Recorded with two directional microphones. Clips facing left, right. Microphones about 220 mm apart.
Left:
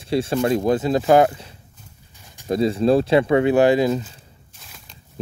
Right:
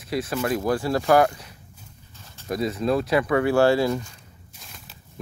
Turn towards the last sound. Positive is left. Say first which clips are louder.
# even
turn(degrees=0)  # may be behind; listen again after turning